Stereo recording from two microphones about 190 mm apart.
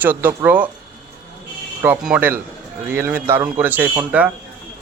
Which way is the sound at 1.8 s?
10° right (ahead or behind).